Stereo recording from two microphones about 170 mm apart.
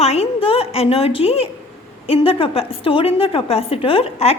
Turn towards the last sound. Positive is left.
turn(degrees=35)  # may be behind; listen again after turning